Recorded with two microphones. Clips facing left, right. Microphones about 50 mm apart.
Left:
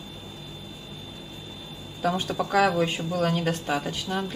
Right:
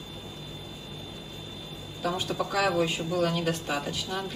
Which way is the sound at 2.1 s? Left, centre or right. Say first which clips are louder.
Left 4 dB; left.